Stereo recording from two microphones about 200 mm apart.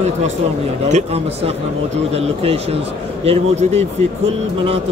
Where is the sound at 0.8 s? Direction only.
35° right (ahead or behind).